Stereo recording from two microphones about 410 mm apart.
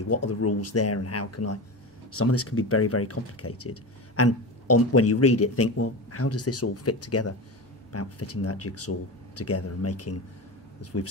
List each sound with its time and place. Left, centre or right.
0.1 s speech: left